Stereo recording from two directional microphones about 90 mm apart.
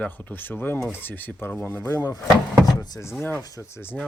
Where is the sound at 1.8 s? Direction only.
35° left (ahead or behind).